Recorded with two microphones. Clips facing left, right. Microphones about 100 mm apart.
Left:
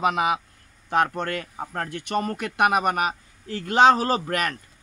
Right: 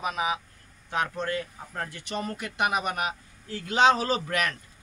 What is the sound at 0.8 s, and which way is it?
A man's voice, 65° left (ahead or behind).